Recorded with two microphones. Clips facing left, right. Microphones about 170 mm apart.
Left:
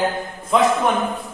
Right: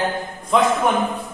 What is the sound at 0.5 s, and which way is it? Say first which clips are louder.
Speech: left 1 dB; centre (ahead or behind).